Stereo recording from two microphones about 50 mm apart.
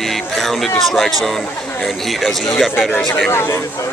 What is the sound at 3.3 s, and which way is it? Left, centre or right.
Speech, left.